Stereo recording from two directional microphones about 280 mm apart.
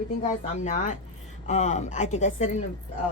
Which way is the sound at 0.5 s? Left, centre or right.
Left.